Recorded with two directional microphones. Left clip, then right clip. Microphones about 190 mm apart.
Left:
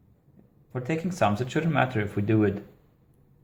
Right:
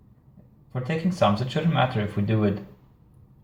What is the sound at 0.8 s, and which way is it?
Speech, 45° left (ahead or behind).